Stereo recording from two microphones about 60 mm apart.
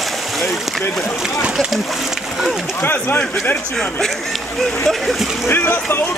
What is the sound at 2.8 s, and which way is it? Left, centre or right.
Speech, left.